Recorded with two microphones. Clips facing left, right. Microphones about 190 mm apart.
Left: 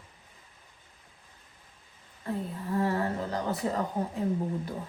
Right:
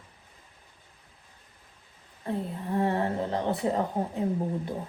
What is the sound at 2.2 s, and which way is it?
A woman's voice, 30° right (ahead or behind).